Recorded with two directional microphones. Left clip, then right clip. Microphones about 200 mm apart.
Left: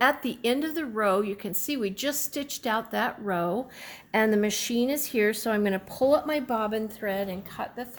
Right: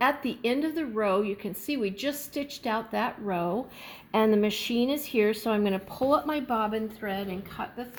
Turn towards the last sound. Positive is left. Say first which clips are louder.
# left 1 dB
turn(degrees=25)  # may be behind; listen again after turning